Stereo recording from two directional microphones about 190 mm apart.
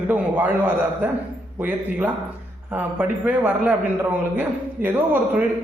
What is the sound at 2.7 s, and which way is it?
A man's voice, 10° right (ahead or behind).